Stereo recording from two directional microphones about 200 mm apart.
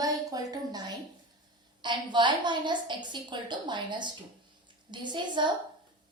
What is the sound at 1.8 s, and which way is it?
A woman's voice, 25° right (ahead or behind).